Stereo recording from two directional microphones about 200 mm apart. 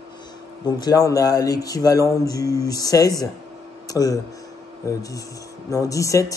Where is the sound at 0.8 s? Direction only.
15° left (ahead or behind).